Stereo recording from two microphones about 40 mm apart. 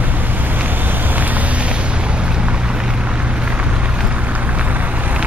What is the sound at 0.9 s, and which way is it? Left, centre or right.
Boat, right.